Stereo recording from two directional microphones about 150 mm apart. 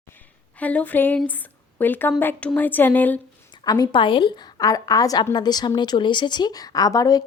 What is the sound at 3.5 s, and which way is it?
A woman's voice, 25° left (ahead or behind).